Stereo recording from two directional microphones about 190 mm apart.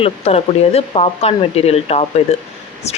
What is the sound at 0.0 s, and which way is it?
A woman's voice, 35° left (ahead or behind).